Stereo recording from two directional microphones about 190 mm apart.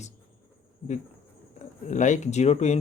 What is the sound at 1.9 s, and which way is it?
Speech, 40° left (ahead or behind).